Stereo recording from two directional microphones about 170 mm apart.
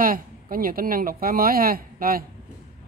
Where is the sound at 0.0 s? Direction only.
55° right (ahead or behind).